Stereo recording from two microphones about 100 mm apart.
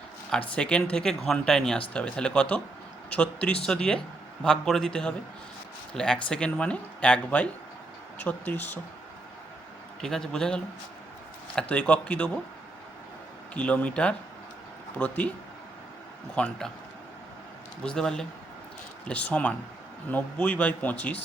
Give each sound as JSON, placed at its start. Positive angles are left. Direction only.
{"t": 0.3, "sound": "a man's voice", "side_deg": 10}
{"t": 10.0, "sound": "a man's voice", "side_deg": 5}
{"t": 11.7, "sound": "speech", "side_deg": 10}
{"t": 13.5, "sound": "speech", "side_deg": 15}
{"t": 16.3, "sound": "speech", "side_deg": 10}
{"t": 17.8, "sound": "speech", "side_deg": 5}